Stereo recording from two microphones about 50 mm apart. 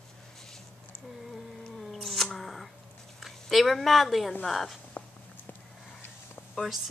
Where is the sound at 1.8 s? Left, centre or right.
Centre.